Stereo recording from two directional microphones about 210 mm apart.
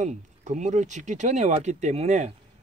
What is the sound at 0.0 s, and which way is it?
Speech, 35° right (ahead or behind).